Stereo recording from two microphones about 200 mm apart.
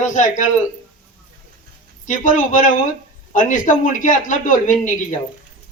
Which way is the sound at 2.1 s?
40° left (ahead or behind).